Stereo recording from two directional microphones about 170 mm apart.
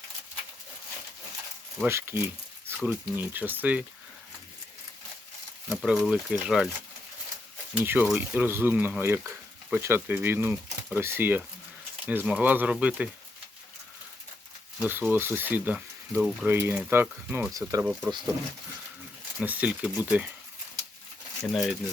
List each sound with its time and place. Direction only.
1.8 s speech: 15° right (ahead or behind)
5.6 s speech: 5° right (ahead or behind)
7.8 s speech: 10° right (ahead or behind)
14.8 s speech: 10° right (ahead or behind)
19.4 s speech: 10° right (ahead or behind)
21.5 s speech: centre (ahead or behind)